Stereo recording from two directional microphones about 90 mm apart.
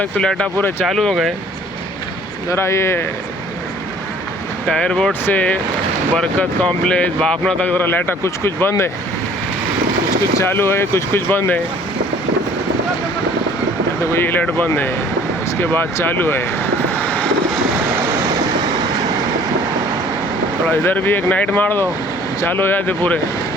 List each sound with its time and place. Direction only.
0.0 s speech: 10° left (ahead or behind)
2.5 s speech: 30° left (ahead or behind)
4.7 s speech: 10° left (ahead or behind); by 8.7 s 25° left (ahead or behind)
10.4 s speech: 25° left (ahead or behind)
14.0 s speech: 25° left (ahead or behind)
16.9 s vehicle: 15° left (ahead or behind)
20.7 s speech: 20° left (ahead or behind)